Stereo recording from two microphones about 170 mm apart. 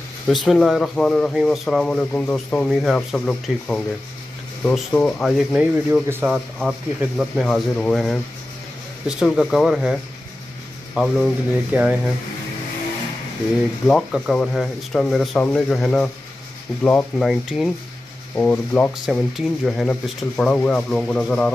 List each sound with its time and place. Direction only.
0.3 s speech: centre (ahead or behind)
5.5 s speech: 5° right (ahead or behind)
11.0 s speech: 10° right (ahead or behind)
13.8 s speech: 5° left (ahead or behind)